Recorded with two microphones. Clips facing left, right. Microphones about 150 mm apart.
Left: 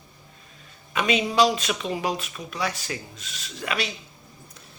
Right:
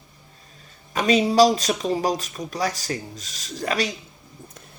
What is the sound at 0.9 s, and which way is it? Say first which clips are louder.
Speech: right 4 dB; 40° right (ahead or behind).